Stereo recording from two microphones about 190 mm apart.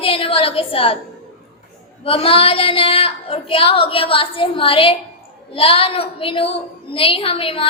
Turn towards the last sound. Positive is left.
turn(degrees=30)  # may be behind; listen again after turning